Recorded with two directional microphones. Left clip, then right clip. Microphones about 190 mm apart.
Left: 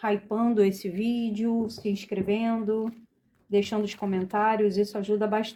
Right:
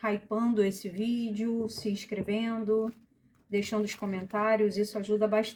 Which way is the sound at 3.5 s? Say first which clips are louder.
Left 5 dB; 40° left (ahead or behind).